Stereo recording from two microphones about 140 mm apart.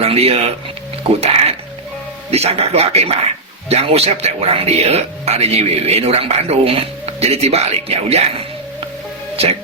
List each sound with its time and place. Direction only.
0.0 s speech: 45° right (ahead or behind)
2.3 s speech: 45° right (ahead or behind)
9.3 s speech: 45° right (ahead or behind)